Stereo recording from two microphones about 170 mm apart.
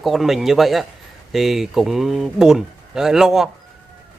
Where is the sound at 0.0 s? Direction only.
Centre (ahead or behind).